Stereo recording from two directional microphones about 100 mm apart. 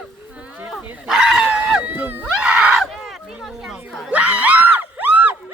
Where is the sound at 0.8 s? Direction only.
15° right (ahead or behind).